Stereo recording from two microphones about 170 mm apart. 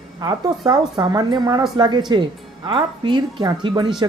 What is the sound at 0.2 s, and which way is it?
Speech, 25° right (ahead or behind).